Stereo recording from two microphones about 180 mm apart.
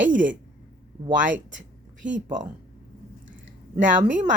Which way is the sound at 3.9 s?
45° right (ahead or behind).